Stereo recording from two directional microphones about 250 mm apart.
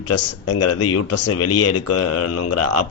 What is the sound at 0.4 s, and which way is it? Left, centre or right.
Speech, left.